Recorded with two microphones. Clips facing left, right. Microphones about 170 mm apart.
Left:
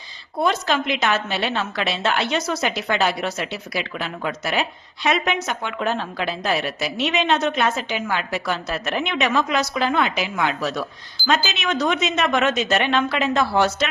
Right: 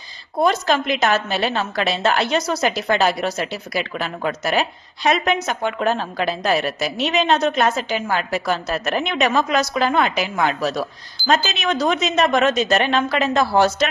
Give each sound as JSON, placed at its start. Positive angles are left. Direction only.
{"t": 0.3, "sound": "a woman's voice", "side_deg": -40}